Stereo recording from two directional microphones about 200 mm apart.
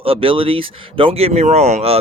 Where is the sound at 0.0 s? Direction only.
25° right (ahead or behind).